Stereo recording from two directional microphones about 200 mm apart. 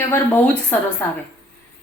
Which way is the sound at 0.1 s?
10° left (ahead or behind).